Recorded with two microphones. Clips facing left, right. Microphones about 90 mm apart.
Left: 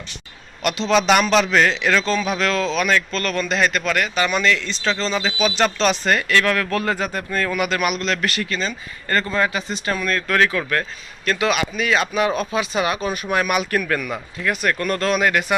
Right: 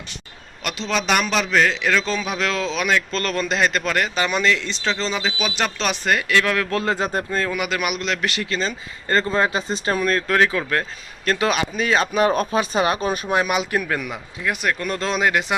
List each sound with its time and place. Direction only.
0.6 s a man's voice: centre (ahead or behind); by 3.0 s 15° right (ahead or behind)
3.1 s speech: 30° right (ahead or behind); by 6.7 s 15° right (ahead or behind)
6.7 s speech: 25° right (ahead or behind)
7.6 s speech: 10° right (ahead or behind); by 13.3 s 35° right (ahead or behind)
13.3 s speech: 20° right (ahead or behind)